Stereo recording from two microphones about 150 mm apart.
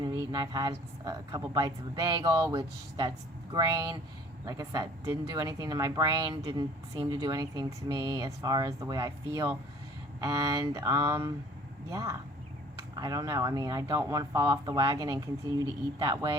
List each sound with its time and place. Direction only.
0.0 s speech: 25° right (ahead or behind)